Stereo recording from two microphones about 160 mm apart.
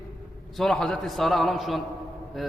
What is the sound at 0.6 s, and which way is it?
A man's voice, 5° left (ahead or behind).